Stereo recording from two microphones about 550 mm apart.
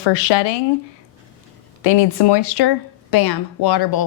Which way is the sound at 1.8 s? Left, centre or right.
Left.